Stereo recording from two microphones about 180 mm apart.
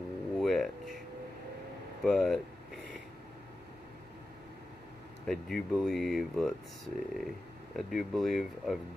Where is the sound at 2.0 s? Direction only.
5° left (ahead or behind).